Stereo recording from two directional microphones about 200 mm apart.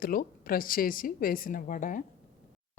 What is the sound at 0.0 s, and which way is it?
Speech, 45° left (ahead or behind).